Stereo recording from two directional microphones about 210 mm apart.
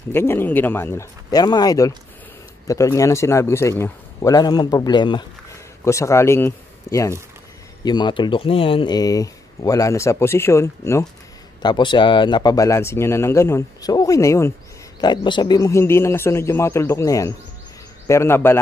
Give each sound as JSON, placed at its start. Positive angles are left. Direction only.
{"t": 0.1, "sound": "speech", "side_deg": 10}